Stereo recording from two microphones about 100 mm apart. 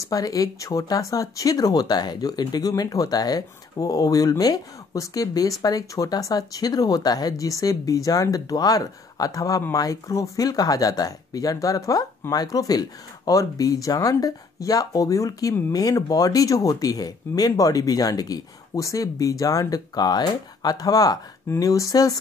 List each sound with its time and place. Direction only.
0.0 s speech: 35° left (ahead or behind)